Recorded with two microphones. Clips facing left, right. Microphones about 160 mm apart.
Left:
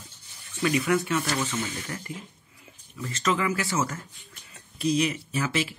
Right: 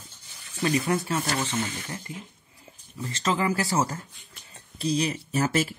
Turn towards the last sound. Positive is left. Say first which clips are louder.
# right 3 dB
turn(degrees=-45)  # may be behind; listen again after turning